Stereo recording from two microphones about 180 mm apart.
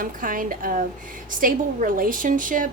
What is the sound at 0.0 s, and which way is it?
A woman's voice, 50° right (ahead or behind).